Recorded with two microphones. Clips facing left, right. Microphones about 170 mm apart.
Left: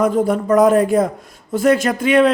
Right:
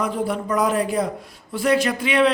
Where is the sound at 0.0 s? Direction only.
45° left (ahead or behind).